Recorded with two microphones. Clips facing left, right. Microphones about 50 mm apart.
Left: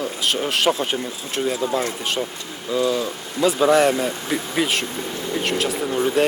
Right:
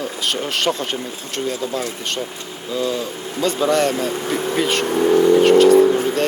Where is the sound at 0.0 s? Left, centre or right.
Centre.